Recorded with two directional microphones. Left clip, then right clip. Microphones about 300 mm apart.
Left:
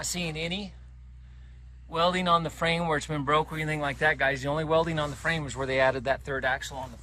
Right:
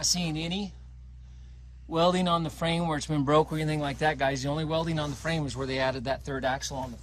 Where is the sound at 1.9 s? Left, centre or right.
Centre.